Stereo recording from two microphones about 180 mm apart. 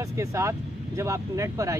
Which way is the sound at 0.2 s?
15° right (ahead or behind).